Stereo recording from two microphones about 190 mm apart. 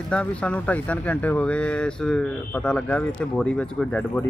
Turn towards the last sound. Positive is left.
turn(degrees=10)  # may be behind; listen again after turning